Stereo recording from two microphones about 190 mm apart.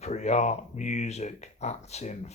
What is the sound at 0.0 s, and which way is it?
Speech, 40° left (ahead or behind).